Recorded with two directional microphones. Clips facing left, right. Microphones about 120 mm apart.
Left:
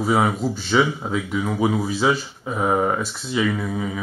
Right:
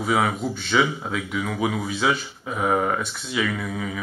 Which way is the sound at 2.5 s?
10° left (ahead or behind).